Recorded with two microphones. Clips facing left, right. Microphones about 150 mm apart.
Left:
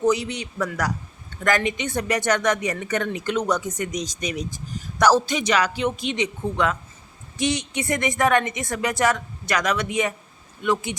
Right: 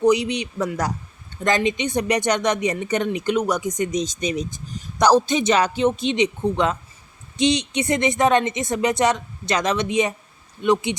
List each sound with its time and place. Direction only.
0.0 s speech: 15° right (ahead or behind)